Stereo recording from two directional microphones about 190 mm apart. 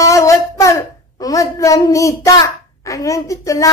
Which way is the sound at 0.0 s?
15° left (ahead or behind).